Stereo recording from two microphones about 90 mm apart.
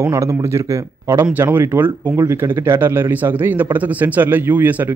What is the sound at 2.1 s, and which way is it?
Speech, 35° right (ahead or behind).